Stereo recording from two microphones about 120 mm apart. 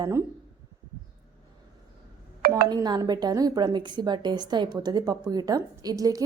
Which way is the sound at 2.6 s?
35° right (ahead or behind).